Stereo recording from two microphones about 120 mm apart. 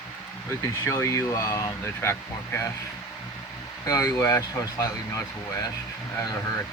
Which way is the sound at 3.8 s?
30° left (ahead or behind).